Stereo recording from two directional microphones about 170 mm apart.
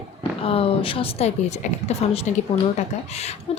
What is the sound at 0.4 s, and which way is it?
Speech, 35° left (ahead or behind).